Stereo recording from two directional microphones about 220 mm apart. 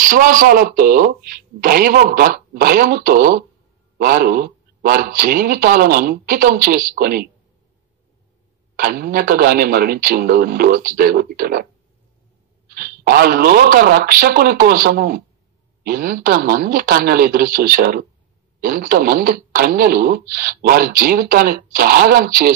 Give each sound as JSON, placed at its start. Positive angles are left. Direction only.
{"t": 0.0, "sound": "speech", "side_deg": -40}
{"t": 8.7, "sound": "speech", "side_deg": -40}
{"t": 12.6, "sound": "speech", "side_deg": -45}